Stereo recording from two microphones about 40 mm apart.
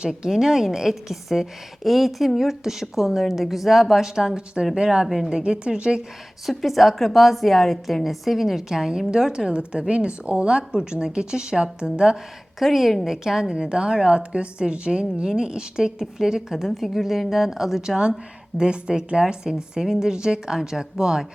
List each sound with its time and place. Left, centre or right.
0.0 s a woman's voice: right
0.3 s a woman's voice: centre
5.0 s a woman's voice: centre
5.3 s a woman's voice: right
6.4 s a woman's voice: centre
9.0 s a woman's voice: right
12.5 s a woman's voice: centre
13.1 s a woman's voice: centre
17.7 s a woman's voice: centre